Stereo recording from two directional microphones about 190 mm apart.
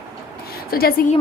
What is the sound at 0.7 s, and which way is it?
Speech, 50° left (ahead or behind).